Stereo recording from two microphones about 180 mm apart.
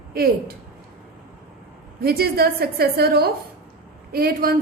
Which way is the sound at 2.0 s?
60° right (ahead or behind).